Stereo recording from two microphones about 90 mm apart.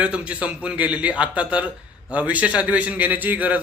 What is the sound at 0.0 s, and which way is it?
A man's voice, 15° right (ahead or behind).